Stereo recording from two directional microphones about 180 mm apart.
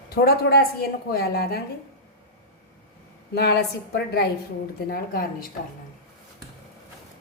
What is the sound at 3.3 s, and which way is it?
A woman's voice, 65° left (ahead or behind).